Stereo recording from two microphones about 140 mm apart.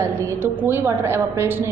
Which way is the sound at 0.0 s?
20° right (ahead or behind).